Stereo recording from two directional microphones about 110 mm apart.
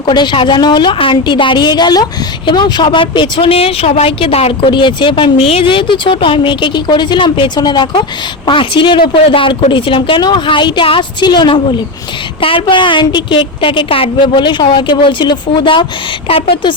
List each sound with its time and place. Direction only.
0.0 s a woman's voice: 40° left (ahead or behind); by 4.7 s 65° left (ahead or behind)
4.7 s a woman's voice: 45° left (ahead or behind)